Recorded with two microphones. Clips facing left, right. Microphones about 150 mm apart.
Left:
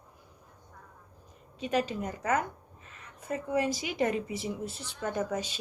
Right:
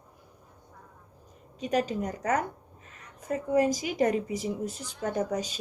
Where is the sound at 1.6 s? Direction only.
45° right (ahead or behind).